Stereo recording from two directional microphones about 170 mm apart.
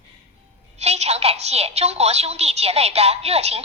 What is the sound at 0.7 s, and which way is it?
A woman's voice, 40° right (ahead or behind).